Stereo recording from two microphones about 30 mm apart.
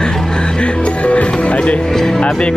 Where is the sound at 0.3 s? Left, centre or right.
Left.